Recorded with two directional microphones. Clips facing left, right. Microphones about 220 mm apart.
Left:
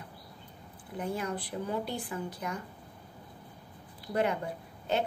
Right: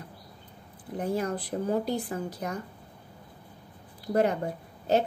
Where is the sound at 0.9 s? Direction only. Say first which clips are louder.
Right 5 dB; 40° right (ahead or behind).